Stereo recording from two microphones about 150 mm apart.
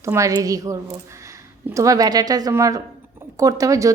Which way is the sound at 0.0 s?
20° right (ahead or behind).